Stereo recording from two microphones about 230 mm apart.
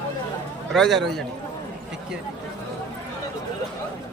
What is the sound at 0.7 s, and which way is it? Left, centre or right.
Speech, centre.